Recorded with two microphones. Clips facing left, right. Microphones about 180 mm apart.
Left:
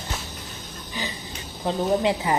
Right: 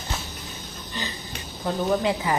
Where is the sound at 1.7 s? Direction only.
20° left (ahead or behind).